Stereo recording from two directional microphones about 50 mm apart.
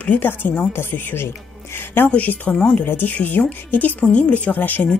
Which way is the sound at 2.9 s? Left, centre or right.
Left.